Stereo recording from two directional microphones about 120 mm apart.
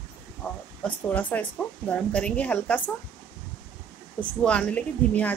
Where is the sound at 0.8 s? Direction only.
10° left (ahead or behind).